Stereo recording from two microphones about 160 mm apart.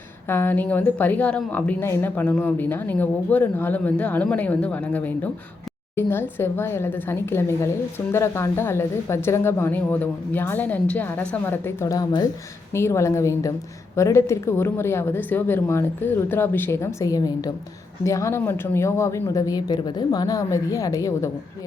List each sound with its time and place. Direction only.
0.3 s a woman's voice: 15° left (ahead or behind)